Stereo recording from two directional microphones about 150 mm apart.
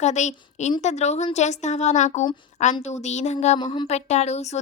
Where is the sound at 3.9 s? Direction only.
45° left (ahead or behind).